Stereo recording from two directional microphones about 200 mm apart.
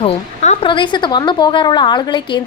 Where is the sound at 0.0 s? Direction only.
30° left (ahead or behind).